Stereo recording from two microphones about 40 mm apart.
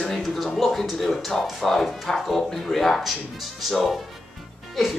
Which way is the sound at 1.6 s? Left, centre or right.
Centre.